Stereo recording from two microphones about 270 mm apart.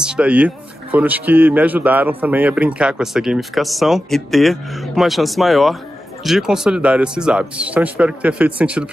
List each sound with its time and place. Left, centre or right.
0.0 s speech: centre